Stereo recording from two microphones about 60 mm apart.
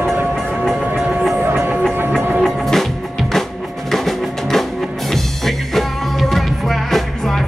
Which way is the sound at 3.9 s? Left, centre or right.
Centre.